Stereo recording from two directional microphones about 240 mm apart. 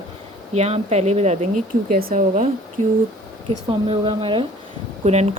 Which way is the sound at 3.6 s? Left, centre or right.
Right.